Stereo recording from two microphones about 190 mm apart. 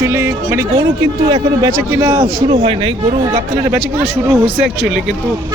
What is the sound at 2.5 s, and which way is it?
Speech, 25° right (ahead or behind).